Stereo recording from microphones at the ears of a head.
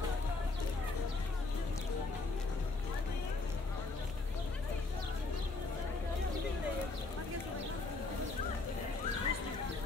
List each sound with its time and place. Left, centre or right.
9.0 s horse: left